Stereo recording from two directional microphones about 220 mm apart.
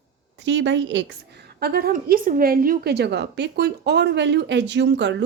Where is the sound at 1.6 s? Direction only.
45° right (ahead or behind).